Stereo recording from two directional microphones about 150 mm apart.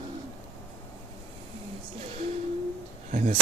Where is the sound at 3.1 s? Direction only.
55° right (ahead or behind).